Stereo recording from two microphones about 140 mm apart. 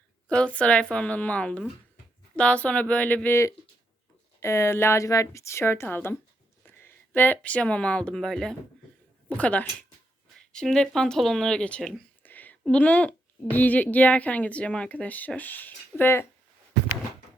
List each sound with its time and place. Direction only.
0.3 s a woman's voice: 10° left (ahead or behind)